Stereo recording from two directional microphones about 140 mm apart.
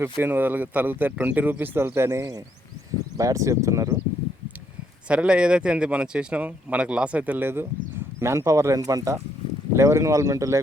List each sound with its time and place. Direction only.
0.0 s speech: 15° right (ahead or behind)
5.0 s speech: 10° right (ahead or behind)